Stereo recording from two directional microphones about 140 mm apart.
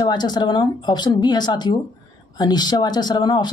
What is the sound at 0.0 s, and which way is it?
Speech, 30° left (ahead or behind).